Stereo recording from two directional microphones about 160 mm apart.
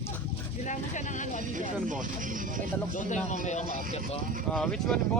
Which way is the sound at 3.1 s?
50° left (ahead or behind).